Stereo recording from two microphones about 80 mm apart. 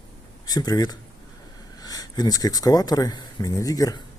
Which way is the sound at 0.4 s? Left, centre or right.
Left.